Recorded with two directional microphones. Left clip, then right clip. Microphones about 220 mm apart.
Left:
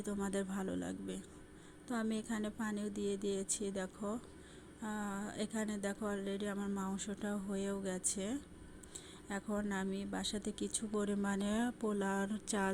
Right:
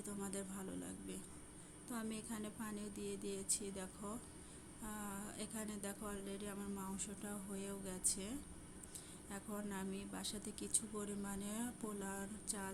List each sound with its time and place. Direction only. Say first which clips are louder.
0.0 s a woman's voice: left 8 dB; 30° left (ahead or behind)